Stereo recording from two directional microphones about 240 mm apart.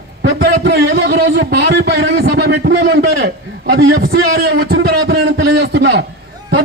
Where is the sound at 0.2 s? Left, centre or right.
Right.